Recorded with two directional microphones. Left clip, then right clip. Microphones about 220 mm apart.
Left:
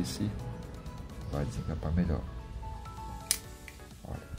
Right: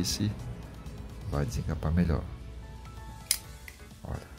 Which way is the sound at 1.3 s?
25° right (ahead or behind).